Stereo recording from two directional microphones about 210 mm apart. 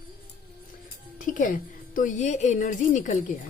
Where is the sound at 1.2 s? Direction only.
40° left (ahead or behind).